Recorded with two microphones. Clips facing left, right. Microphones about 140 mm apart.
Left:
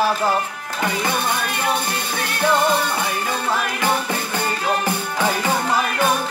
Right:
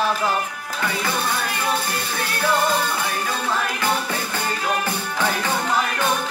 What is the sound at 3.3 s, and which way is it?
Music, 15° left (ahead or behind).